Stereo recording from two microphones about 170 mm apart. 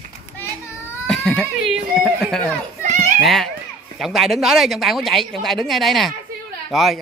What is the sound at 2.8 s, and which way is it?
Children playing, 45° right (ahead or behind).